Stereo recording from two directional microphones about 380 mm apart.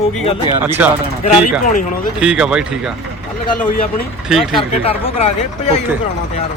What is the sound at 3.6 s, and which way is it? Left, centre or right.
Speech, left.